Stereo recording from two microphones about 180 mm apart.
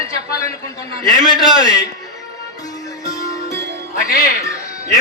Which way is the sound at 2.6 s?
20° left (ahead or behind).